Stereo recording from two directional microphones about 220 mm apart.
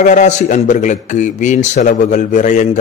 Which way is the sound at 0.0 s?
35° left (ahead or behind).